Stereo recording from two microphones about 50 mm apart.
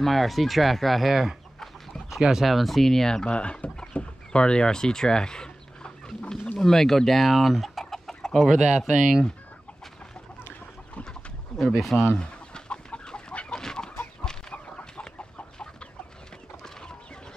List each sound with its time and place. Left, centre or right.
0.0 s speech: centre
3.3 s speech: left
3.9 s chicken: left
6.6 s speech: centre
8.7 s speech: centre
11.5 s speech: centre
12.2 s chicken: centre